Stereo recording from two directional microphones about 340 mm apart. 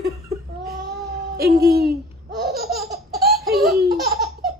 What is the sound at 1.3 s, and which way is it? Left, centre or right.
Music, right.